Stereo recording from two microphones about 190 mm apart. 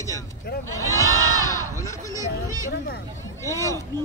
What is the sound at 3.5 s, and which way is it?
Speech, 15° left (ahead or behind).